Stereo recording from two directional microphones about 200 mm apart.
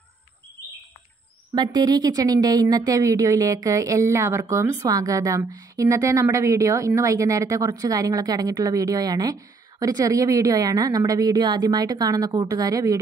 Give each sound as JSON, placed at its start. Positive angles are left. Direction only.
{"t": 1.5, "sound": "a woman's voice", "side_deg": -20}